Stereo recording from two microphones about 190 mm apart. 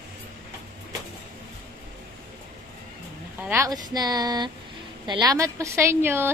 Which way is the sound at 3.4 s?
15° right (ahead or behind).